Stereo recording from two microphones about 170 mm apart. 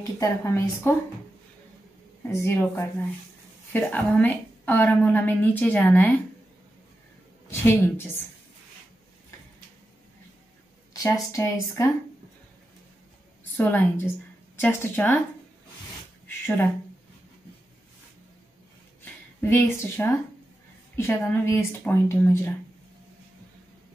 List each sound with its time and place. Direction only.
0.0 s a woman's voice: 20° left (ahead or behind)
2.3 s a woman's voice: 15° left (ahead or behind)
7.4 s a woman's voice: 15° left (ahead or behind)
10.9 s a woman's voice: 20° left (ahead or behind)
13.6 s a woman's voice: 10° left (ahead or behind)
16.3 s a sound: 10° left (ahead or behind)
19.4 s a woman's voice: 10° left (ahead or behind)